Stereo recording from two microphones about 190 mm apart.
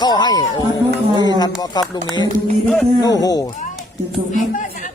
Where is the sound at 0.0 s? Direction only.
20° left (ahead or behind).